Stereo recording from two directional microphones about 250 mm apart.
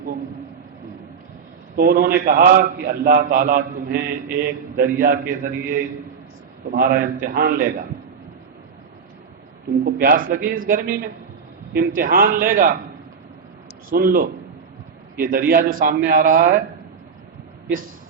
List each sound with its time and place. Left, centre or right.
1.7 s a man's voice: right
9.8 s a man's voice: right
13.9 s a man's voice: right